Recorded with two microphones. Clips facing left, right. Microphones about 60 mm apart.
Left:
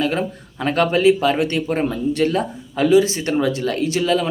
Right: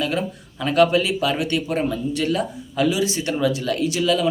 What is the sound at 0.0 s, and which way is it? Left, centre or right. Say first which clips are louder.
A man's voice: left 3 dB; left.